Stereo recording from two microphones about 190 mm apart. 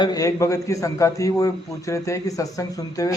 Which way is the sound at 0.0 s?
20° left (ahead or behind).